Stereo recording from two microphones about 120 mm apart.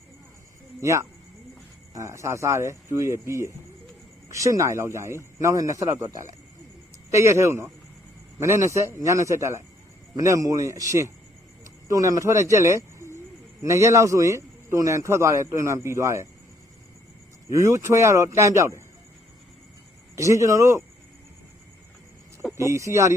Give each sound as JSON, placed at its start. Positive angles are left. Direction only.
{"t": 0.8, "sound": "speech", "side_deg": -25}
{"t": 17.5, "sound": "speech", "side_deg": -25}
{"t": 20.1, "sound": "speech", "side_deg": -25}
{"t": 22.5, "sound": "speech", "side_deg": -25}